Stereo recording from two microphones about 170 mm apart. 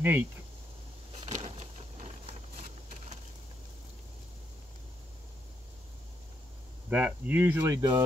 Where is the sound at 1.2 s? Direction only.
40° right (ahead or behind).